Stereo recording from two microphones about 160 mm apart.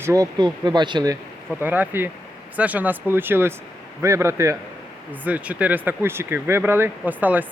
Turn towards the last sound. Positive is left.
turn(degrees=-10)  # may be behind; listen again after turning